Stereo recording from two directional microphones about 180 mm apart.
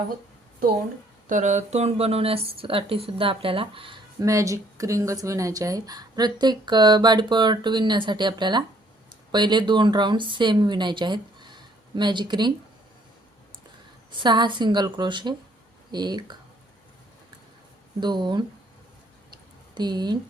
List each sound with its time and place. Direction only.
1.3 s speech: 40° right (ahead or behind); by 12.5 s 25° right (ahead or behind)
14.1 s speech: 25° right (ahead or behind)
18.0 s speech: 25° right (ahead or behind)
19.7 s speech: 25° right (ahead or behind)